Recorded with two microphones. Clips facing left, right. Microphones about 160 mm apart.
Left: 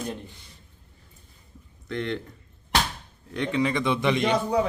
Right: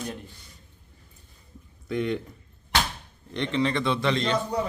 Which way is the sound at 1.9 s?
10° right (ahead or behind).